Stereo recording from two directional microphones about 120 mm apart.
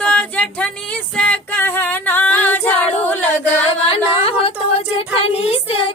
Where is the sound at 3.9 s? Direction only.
55° left (ahead or behind).